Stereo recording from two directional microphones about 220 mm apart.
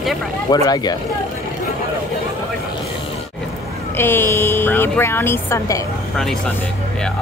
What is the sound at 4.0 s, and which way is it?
Speech, 10° left (ahead or behind).